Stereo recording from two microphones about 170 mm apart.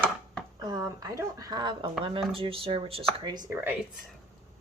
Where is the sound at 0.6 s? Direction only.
20° right (ahead or behind).